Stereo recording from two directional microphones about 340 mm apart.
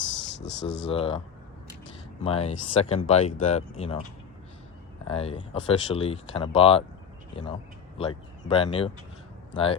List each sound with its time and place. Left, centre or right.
0.2 s a sound: left
0.9 s speech: centre
2.2 s speech: centre
5.0 s speech: centre
7.9 s speech: centre